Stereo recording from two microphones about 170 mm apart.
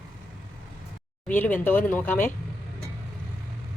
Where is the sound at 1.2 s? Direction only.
10° left (ahead or behind).